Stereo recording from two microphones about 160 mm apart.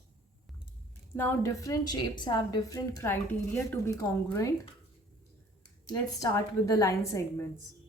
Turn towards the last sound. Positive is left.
turn(degrees=20)  # may be behind; listen again after turning